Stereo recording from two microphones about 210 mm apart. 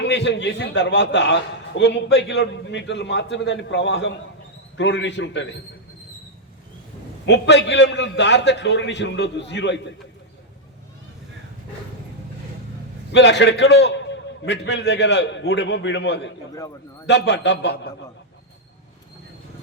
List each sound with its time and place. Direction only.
0.0 s a man's voice: 55° left (ahead or behind)
7.3 s a man's voice: 55° left (ahead or behind)
13.1 s a man's voice: 55° left (ahead or behind)